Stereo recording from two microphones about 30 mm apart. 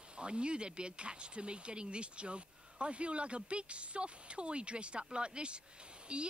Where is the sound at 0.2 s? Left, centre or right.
Right.